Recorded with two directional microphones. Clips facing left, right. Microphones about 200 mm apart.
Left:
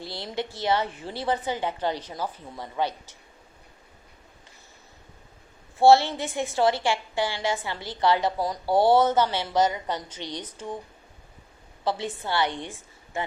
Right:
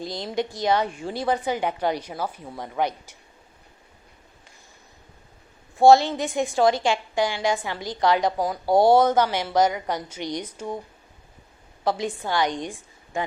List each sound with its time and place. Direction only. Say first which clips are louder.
0.0 s a woman's voice: right 5 dB; 15° right (ahead or behind)
5.7 s a woman's voice: right 2 dB; 15° right (ahead or behind)
11.9 s a woman's voice: right 3 dB; 15° right (ahead or behind)